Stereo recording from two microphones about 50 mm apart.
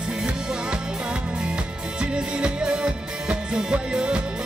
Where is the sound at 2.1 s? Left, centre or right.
Centre.